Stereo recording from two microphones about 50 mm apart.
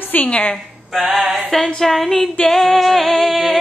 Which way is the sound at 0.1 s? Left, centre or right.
Left.